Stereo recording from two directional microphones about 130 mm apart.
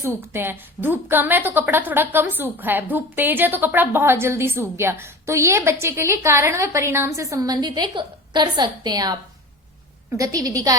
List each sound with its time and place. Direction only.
0.0 s a woman's voice: 20° right (ahead or behind)